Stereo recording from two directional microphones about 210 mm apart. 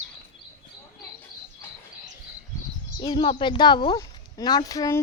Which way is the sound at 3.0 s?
20° left (ahead or behind).